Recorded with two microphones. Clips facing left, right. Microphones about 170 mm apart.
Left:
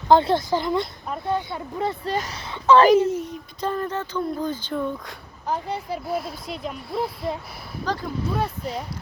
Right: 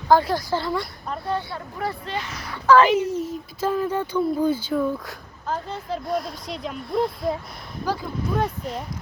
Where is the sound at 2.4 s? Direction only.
25° left (ahead or behind).